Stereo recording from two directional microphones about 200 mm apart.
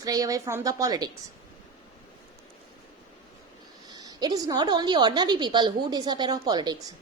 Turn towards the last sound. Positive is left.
turn(degrees=-20)  # may be behind; listen again after turning